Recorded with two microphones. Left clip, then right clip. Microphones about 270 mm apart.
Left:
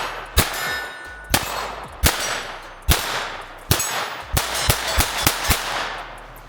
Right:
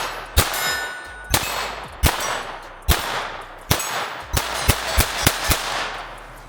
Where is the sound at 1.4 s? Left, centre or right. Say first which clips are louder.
Right 1 dB; centre.